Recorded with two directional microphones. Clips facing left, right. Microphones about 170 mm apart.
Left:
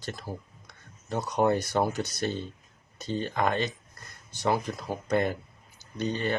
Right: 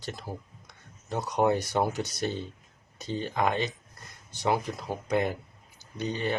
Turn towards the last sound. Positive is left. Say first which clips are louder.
# left 1 dB
turn(degrees=-15)  # may be behind; listen again after turning